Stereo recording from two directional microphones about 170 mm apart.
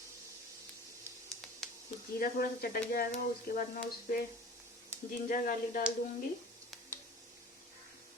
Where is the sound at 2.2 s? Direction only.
60° left (ahead or behind).